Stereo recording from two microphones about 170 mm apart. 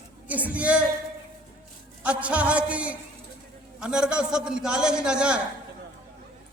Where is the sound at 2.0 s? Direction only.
5° right (ahead or behind).